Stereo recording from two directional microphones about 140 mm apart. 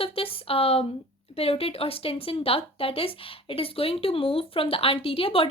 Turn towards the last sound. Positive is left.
turn(degrees=40)  # may be behind; listen again after turning